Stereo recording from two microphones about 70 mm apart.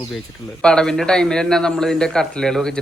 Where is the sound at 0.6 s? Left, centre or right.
Centre.